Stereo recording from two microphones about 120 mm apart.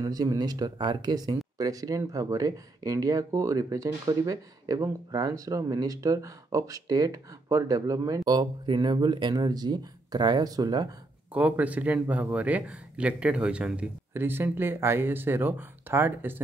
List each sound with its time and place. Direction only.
0.0 s speech: 30° right (ahead or behind)
11.3 s a man's voice: 10° right (ahead or behind)